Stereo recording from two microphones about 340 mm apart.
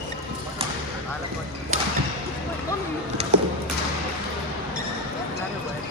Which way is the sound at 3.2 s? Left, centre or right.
Centre.